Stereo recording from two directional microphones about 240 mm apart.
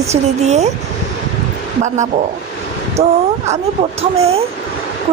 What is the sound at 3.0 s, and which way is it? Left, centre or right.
Speech, right.